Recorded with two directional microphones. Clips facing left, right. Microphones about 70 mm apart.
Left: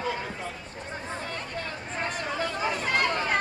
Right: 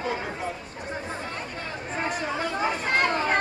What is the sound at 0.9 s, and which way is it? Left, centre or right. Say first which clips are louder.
Chatter: right 2 dB; centre.